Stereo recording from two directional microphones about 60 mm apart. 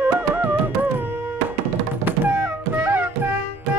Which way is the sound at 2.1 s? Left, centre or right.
Right.